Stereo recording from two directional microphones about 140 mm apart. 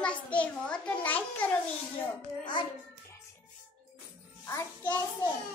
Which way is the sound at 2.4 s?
30° left (ahead or behind).